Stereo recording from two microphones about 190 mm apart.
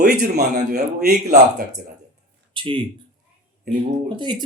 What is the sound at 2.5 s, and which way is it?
Speech, 25° right (ahead or behind).